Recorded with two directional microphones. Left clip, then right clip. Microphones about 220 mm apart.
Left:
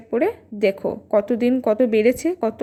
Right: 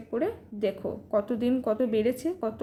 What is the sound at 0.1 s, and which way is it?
A woman's voice, 30° left (ahead or behind).